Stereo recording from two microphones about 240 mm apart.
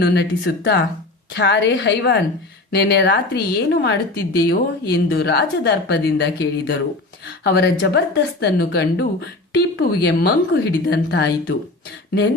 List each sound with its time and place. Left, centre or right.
0.0 s speech: left